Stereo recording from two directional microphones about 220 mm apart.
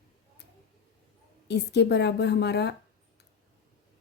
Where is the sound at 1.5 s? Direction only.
50° left (ahead or behind).